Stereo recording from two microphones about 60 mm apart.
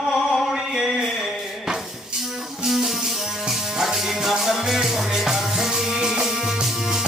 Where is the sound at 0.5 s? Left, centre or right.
Centre.